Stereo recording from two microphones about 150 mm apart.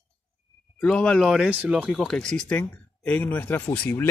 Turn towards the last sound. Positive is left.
turn(degrees=10)  # may be behind; listen again after turning